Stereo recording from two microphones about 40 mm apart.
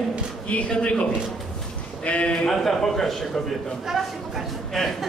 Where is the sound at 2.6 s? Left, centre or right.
Centre.